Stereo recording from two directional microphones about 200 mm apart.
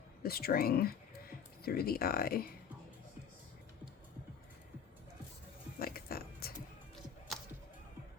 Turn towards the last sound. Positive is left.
turn(degrees=0)  # may be behind; listen again after turning